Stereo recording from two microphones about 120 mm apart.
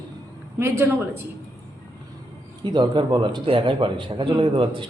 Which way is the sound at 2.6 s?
40° right (ahead or behind).